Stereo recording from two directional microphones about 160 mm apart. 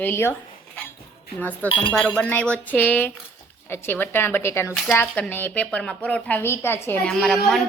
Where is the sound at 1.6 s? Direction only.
10° left (ahead or behind).